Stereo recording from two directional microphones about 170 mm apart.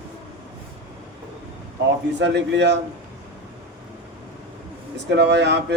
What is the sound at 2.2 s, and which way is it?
Speech, 90° right.